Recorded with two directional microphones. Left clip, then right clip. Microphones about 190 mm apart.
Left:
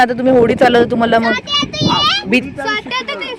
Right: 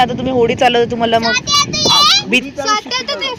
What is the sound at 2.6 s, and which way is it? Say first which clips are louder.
Speech: right 2 dB; 35° left (ahead or behind).